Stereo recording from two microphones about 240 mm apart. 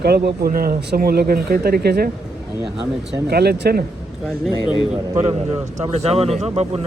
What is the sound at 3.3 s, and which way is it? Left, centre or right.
Speech, right.